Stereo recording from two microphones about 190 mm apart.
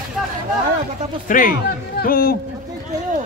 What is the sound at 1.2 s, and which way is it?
A man's voice, 45° left (ahead or behind).